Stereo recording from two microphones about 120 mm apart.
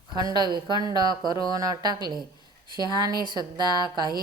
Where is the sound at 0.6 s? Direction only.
35° left (ahead or behind).